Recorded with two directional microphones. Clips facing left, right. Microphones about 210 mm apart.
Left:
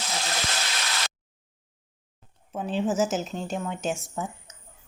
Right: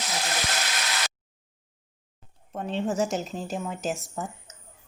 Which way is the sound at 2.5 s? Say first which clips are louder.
Left 2 dB; 5° left (ahead or behind).